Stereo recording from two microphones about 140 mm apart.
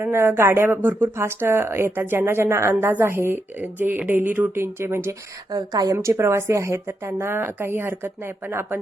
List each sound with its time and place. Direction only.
0.0 s speech: 15° right (ahead or behind)
5.5 s a woman's voice: 30° right (ahead or behind)